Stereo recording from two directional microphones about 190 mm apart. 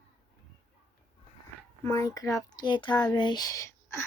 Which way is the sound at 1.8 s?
15° left (ahead or behind).